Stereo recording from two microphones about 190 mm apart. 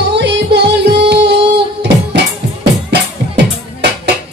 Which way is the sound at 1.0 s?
65° right (ahead or behind).